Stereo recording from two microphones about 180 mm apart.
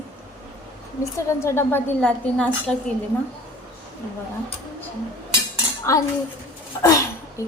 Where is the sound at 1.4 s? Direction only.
15° left (ahead or behind).